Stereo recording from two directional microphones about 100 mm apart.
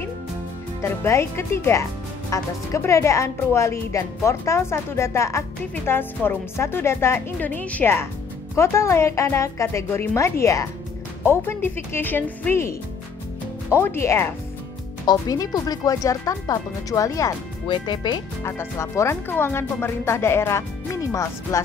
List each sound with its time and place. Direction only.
0.8 s speech: 25° left (ahead or behind)
13.7 s speech: 25° left (ahead or behind)
15.0 s speech: 40° left (ahead or behind)
17.6 s speech: 50° left (ahead or behind)
18.4 s speech: 30° left (ahead or behind)